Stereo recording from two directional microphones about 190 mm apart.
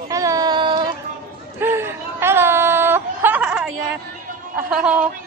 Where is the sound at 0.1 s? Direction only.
15° right (ahead or behind).